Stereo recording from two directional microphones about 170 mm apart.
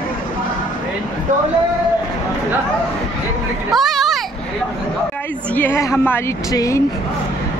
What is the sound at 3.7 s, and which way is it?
Children playing, centre (ahead or behind).